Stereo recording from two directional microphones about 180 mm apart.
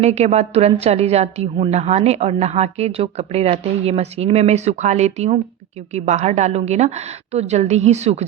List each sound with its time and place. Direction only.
0.0 s a woman's voice: 40° right (ahead or behind)